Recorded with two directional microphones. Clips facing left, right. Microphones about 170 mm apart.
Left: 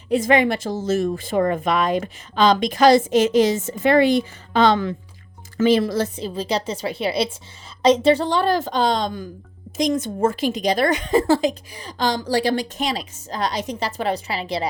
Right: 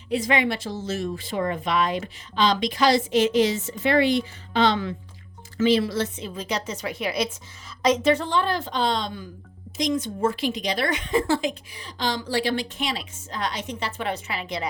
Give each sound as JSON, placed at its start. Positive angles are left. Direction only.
{"t": 0.1, "sound": "a woman's voice", "side_deg": 50}